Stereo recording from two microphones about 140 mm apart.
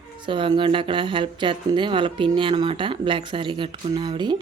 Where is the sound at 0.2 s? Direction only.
35° right (ahead or behind).